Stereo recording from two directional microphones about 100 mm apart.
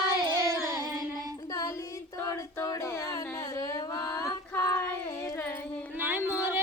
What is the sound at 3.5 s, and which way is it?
Female singing, 35° left (ahead or behind).